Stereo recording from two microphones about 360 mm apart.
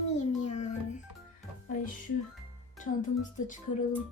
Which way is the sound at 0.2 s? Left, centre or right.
Centre.